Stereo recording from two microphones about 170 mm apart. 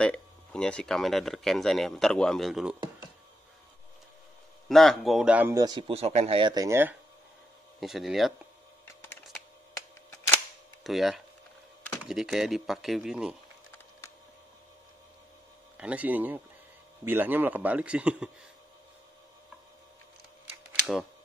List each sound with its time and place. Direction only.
0.0 s speech: 5° left (ahead or behind)
4.6 s speech: centre (ahead or behind)
5.5 s speech: 20° right (ahead or behind)
7.8 s speech: centre (ahead or behind)
9.0 s computer keyboard: 10° left (ahead or behind)
10.8 s speech: centre (ahead or behind)
15.8 s a man's voice: 10° right (ahead or behind)